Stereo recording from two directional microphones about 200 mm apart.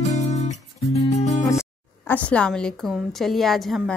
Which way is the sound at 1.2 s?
35° left (ahead or behind).